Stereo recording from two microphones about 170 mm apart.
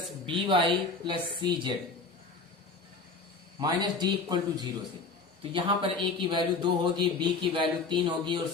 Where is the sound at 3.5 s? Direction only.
25° right (ahead or behind).